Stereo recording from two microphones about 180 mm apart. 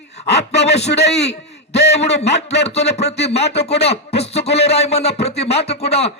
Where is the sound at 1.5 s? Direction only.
70° left (ahead or behind).